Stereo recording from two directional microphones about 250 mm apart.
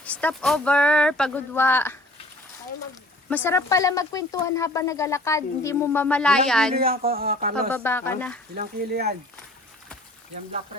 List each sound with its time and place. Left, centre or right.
0.0 s speech: centre
3.2 s speech: centre
6.7 s speech: right
7.7 s speech: centre
8.5 s speech: right